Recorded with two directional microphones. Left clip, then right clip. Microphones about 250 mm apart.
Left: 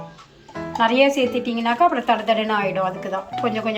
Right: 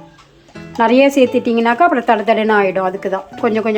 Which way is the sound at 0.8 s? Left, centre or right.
Right.